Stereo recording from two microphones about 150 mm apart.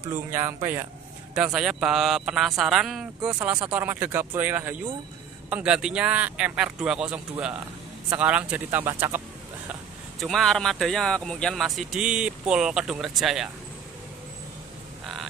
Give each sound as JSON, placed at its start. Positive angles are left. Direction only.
{"t": 0.1, "sound": "speech", "side_deg": -15}
{"t": 1.3, "sound": "speech", "side_deg": -5}
{"t": 10.2, "sound": "speech", "side_deg": 0}